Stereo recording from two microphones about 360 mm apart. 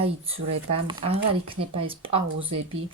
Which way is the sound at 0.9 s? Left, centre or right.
Centre.